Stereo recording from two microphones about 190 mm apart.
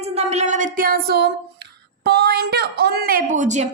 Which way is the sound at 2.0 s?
60° right (ahead or behind).